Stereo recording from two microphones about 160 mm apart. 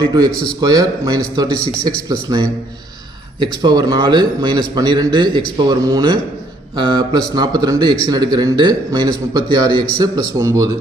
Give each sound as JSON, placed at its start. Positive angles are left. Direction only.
{"t": 0.0, "sound": "a man's voice", "side_deg": -25}